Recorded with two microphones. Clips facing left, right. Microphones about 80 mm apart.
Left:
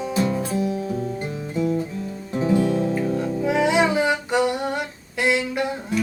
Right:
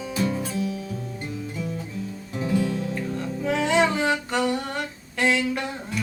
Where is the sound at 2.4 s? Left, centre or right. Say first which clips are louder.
Left 5 dB; left.